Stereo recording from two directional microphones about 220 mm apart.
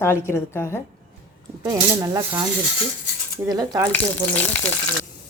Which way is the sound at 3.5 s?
15° right (ahead or behind).